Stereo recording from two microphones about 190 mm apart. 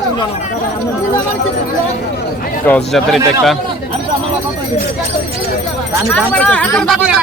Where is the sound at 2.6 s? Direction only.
5° left (ahead or behind).